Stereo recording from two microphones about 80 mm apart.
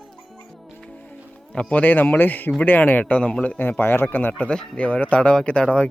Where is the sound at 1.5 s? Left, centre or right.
Centre.